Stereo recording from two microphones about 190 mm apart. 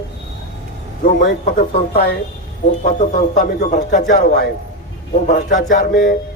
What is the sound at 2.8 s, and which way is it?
A man's voice, 45° left (ahead or behind).